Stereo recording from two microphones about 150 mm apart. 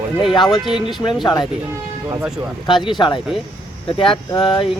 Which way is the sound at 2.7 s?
30° left (ahead or behind).